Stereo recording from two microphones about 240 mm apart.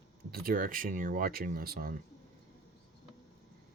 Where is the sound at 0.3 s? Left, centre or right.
Right.